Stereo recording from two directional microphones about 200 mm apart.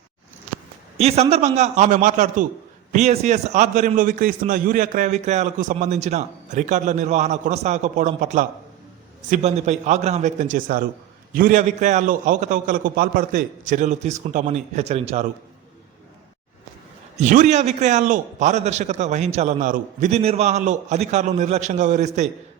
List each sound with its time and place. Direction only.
0.9 s a man's voice: 30° right (ahead or behind)
17.2 s a man's voice: 35° right (ahead or behind)